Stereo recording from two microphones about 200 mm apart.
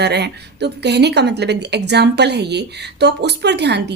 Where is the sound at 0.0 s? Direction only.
55° right (ahead or behind).